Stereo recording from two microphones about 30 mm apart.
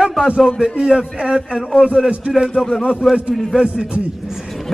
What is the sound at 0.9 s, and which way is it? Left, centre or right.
Speech, right.